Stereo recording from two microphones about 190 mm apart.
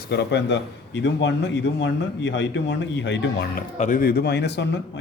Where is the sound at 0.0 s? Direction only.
60° left (ahead or behind).